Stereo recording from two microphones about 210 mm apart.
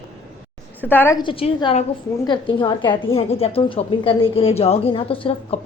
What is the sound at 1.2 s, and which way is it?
A woman's voice, 25° left (ahead or behind).